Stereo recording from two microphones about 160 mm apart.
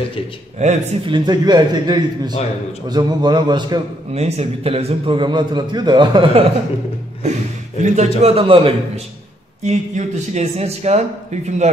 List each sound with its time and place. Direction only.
0.6 s speech: 45° right (ahead or behind)
1.0 s a man's voice: 30° right (ahead or behind)
4.1 s a man's voice: 40° right (ahead or behind)
7.8 s a man's voice: 45° right (ahead or behind)
9.6 s speech: 45° right (ahead or behind)